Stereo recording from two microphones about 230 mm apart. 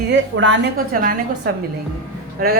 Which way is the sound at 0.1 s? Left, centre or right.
Right.